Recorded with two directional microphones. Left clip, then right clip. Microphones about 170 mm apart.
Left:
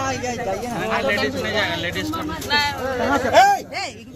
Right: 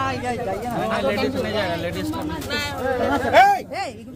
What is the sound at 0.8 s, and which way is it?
Speech, 90° right.